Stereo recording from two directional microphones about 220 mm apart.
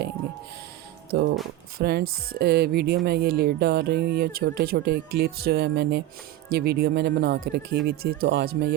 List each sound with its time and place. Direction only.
1.1 s speech: 50° right (ahead or behind)